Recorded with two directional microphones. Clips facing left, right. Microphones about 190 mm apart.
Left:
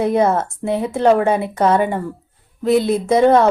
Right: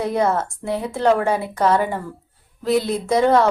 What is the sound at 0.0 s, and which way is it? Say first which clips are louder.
Speech: left 4 dB; 20° left (ahead or behind).